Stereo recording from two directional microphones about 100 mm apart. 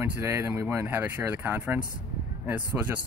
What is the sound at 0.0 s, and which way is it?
Speech, 25° right (ahead or behind).